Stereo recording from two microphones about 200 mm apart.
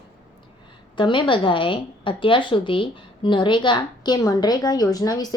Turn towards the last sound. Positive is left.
turn(degrees=20)  # may be behind; listen again after turning